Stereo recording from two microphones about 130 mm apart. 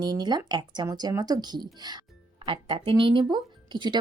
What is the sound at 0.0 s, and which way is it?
Speech, 35° right (ahead or behind).